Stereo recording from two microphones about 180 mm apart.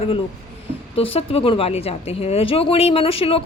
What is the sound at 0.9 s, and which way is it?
Speech, 30° left (ahead or behind).